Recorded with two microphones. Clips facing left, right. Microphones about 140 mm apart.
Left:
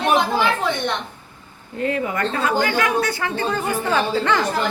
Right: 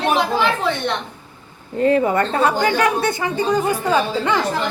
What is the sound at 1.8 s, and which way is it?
A woman's voice, 35° right (ahead or behind).